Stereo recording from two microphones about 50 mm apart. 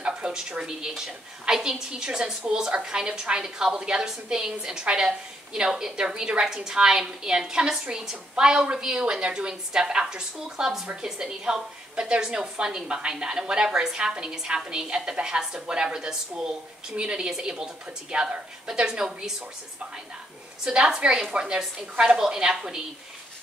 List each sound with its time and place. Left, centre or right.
0.0 s a woman's voice: centre
20.6 s a woman's voice: centre